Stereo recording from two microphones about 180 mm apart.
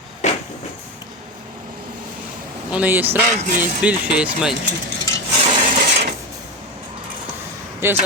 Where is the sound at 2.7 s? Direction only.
10° right (ahead or behind).